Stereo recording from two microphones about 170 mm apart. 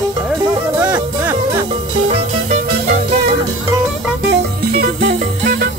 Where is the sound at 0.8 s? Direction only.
10° right (ahead or behind).